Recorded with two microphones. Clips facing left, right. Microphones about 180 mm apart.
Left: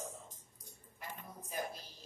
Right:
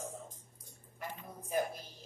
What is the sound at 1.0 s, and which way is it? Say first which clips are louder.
Music: right 4 dB; 50° right (ahead or behind).